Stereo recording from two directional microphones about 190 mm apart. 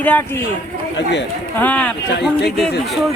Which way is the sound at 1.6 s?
5° left (ahead or behind).